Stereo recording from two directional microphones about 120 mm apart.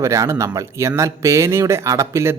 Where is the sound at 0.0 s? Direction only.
25° right (ahead or behind).